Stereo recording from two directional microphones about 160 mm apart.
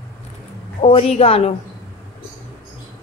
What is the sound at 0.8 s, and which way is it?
Speech, 45° left (ahead or behind).